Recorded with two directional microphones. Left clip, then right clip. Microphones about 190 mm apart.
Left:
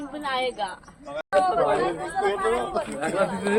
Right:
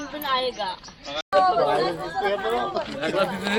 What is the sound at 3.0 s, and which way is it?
Speech, 60° left (ahead or behind).